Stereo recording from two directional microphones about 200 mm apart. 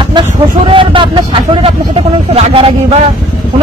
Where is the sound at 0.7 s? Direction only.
25° right (ahead or behind).